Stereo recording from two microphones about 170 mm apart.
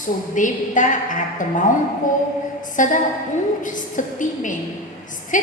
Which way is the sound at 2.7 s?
50° left (ahead or behind).